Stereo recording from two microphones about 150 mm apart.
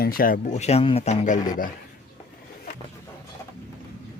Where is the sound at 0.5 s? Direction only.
45° left (ahead or behind).